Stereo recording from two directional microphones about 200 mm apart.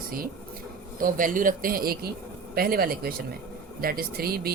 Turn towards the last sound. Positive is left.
turn(degrees=-50)  # may be behind; listen again after turning